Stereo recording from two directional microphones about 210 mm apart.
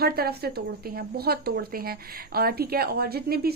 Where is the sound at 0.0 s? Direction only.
45° right (ahead or behind).